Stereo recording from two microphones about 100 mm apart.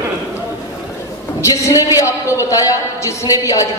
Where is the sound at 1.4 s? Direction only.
30° left (ahead or behind).